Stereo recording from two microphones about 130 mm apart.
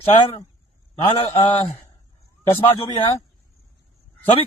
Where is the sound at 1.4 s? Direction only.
40° left (ahead or behind).